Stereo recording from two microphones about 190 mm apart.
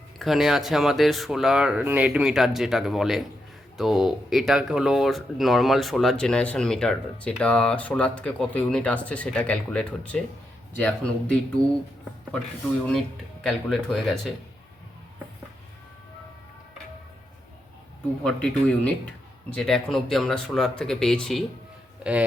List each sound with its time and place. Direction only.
0.2 s speech: centre (ahead or behind)
12.9 s speech: centre (ahead or behind)
18.2 s speech: 5° left (ahead or behind)